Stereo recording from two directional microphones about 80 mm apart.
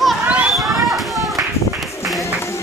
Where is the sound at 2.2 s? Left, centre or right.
Left.